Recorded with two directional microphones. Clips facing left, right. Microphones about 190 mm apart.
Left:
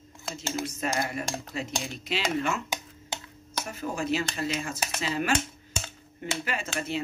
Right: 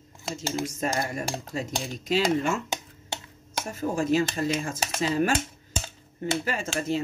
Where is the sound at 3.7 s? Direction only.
45° right (ahead or behind).